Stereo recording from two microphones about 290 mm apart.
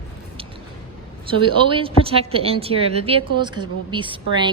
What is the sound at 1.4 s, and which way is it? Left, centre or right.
A woman's voice, centre.